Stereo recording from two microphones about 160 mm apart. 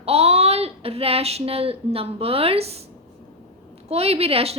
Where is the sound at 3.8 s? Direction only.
40° right (ahead or behind).